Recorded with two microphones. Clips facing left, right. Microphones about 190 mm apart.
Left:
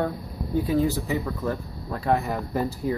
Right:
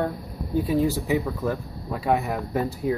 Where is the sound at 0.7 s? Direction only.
5° right (ahead or behind).